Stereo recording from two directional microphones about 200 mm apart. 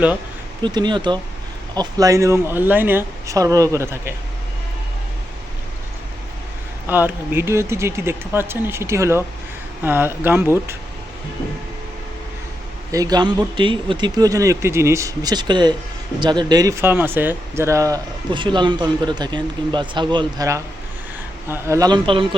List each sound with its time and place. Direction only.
0.6 s speech: 20° right (ahead or behind)
6.8 s speech: 10° right (ahead or behind)
12.9 s speech: 20° right (ahead or behind)